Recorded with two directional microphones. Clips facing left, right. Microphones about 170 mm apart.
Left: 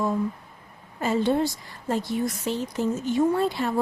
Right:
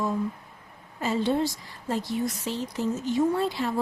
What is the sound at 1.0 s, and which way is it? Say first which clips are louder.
Speech: left 2 dB; 50° left (ahead or behind).